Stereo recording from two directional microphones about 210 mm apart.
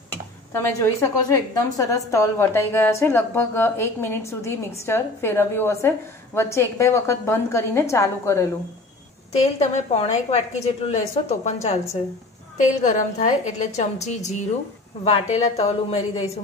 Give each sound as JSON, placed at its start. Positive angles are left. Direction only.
{"t": 0.5, "sound": "a woman's voice", "side_deg": 15}
{"t": 9.3, "sound": "a woman's voice", "side_deg": 30}